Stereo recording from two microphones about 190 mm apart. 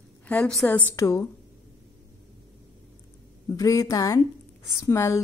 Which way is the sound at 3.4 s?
15° left (ahead or behind).